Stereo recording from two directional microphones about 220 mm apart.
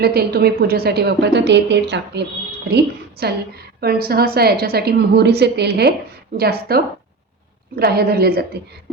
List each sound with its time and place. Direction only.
0.0 s a woman's voice: 45° right (ahead or behind)